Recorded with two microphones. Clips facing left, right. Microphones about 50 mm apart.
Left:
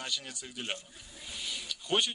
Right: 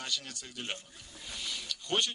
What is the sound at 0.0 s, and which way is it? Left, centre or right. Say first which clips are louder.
A man's voice: even; centre.